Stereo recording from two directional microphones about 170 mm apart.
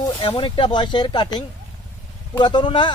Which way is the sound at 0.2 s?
30° left (ahead or behind).